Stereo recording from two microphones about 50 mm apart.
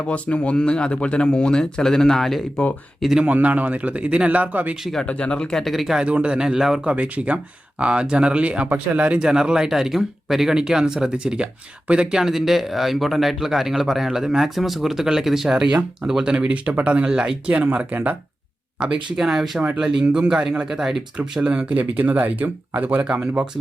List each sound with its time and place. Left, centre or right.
0.0 s speech: left; by 2.4 s centre
3.2 s speech: right
5.0 s speech: left
5.5 s speech: centre
6.0 s speech: right
6.4 s speech: centre
6.8 s speech: right
17.9 s speech: right
18.8 s speech: centre
19.2 s speech: centre
21.4 s speech: right
23.0 s speech: right